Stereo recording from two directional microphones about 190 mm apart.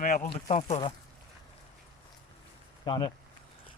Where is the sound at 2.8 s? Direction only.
25° left (ahead or behind).